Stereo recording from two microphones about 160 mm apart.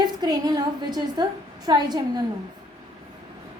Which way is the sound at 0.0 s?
25° right (ahead or behind).